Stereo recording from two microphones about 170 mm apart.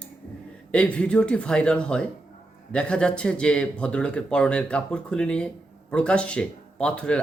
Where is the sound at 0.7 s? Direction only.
5° left (ahead or behind).